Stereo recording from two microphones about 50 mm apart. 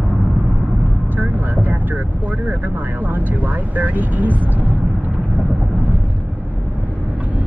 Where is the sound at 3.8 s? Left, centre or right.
Right.